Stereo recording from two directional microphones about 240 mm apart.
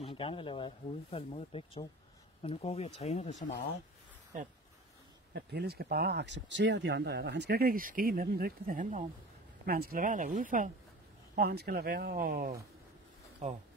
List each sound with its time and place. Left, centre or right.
0.0 s speech: left
5.3 s speech: right